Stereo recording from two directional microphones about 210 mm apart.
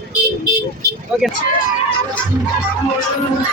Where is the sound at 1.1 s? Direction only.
5° right (ahead or behind).